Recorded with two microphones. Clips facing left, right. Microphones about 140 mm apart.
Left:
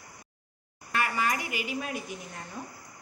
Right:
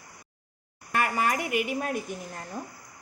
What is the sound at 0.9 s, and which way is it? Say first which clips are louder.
A woman's voice: right 3 dB; 45° right (ahead or behind).